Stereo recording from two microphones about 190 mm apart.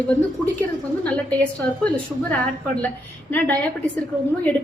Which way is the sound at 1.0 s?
5° left (ahead or behind).